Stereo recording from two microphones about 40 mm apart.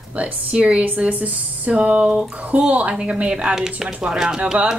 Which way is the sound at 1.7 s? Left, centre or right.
Right.